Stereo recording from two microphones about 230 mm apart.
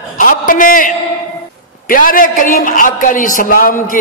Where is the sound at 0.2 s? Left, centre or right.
Left.